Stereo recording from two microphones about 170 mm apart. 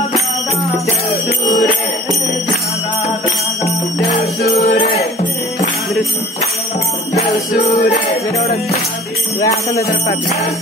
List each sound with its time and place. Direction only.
4.2 s jingle bell: 70° left (ahead or behind)
7.2 s jingle bell: 40° left (ahead or behind)
9.4 s jingle bell: 20° left (ahead or behind)